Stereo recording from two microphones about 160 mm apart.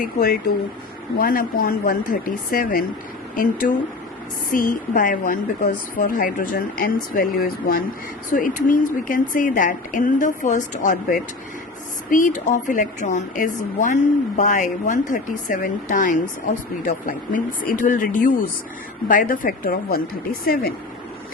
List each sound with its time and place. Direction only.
0.0 s speech: 75° left (ahead or behind)
1.2 s speech: 60° left (ahead or behind)
8.3 s a woman's voice: 55° left (ahead or behind)